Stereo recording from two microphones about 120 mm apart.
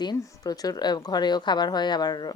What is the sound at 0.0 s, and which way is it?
Speech, 35° left (ahead or behind).